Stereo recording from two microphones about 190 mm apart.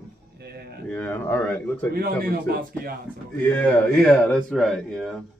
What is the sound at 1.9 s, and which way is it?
A man's voice, 55° right (ahead or behind).